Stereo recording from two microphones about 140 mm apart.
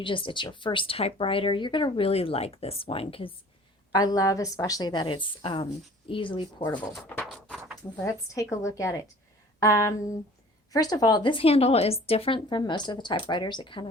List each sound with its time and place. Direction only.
0.0 s speech: 35° left (ahead or behind)
3.9 s a woman's voice: 25° left (ahead or behind)
7.9 s a woman's voice: 20° left (ahead or behind); by 13.8 s 35° left (ahead or behind)